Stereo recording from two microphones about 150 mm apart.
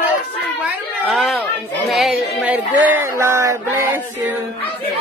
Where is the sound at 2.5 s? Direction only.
15° right (ahead or behind).